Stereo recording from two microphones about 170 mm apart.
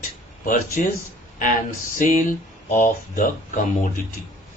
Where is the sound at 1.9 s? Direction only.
50° left (ahead or behind).